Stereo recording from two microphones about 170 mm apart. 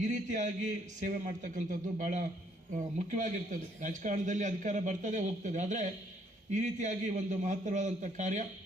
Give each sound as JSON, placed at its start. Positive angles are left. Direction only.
{"t": 0.0, "sound": "speech", "side_deg": -45}